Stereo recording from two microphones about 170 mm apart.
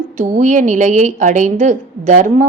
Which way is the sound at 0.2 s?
45° right (ahead or behind).